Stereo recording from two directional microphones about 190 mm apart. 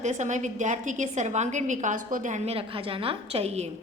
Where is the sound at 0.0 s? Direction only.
40° right (ahead or behind).